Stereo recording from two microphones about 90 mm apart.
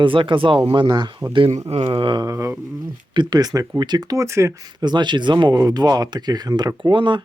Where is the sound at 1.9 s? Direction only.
70° right (ahead or behind).